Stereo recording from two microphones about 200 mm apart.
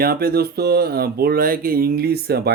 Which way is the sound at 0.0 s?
50° right (ahead or behind).